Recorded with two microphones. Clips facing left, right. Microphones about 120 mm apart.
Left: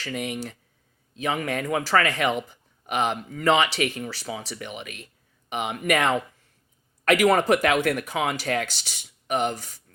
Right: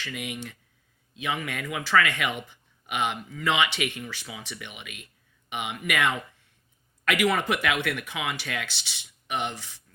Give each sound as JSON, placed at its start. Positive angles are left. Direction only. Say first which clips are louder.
{"t": 0.0, "sound": "speech", "louder": "left 5 dB", "side_deg": 35}